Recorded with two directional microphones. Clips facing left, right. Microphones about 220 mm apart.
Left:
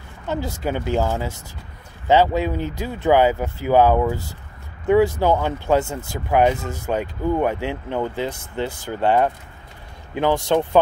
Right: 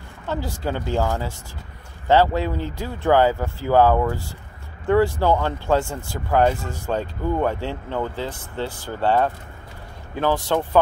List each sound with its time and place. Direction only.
0.3 s speech: 20° left (ahead or behind)